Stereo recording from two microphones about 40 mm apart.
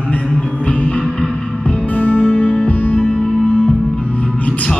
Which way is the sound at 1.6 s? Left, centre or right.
Left.